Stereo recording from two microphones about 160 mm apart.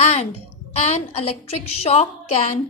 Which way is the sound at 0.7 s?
45° left (ahead or behind).